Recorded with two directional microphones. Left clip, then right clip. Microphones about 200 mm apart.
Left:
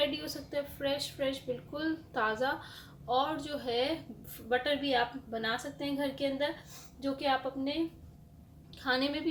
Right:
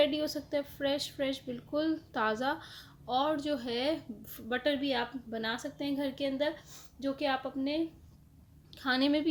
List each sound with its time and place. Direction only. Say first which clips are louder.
0.0 s a woman's voice: right 4 dB; 50° right (ahead or behind)